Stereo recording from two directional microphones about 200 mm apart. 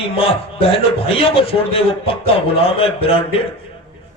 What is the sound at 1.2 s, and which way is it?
A man's voice, 25° left (ahead or behind).